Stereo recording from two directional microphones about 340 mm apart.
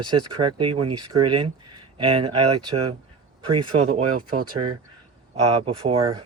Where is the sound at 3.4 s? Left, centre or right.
Centre.